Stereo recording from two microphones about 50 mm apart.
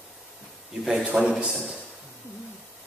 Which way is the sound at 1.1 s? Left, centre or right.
Right.